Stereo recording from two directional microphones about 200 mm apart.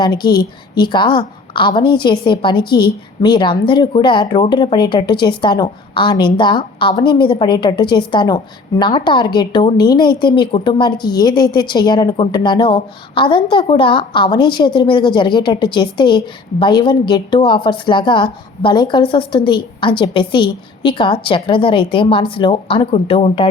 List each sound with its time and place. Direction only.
0.0 s a woman's voice: 20° left (ahead or behind)